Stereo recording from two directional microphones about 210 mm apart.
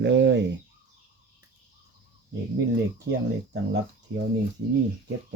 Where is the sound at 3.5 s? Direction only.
60° right (ahead or behind).